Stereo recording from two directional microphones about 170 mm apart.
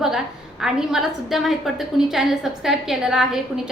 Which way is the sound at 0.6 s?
5° right (ahead or behind).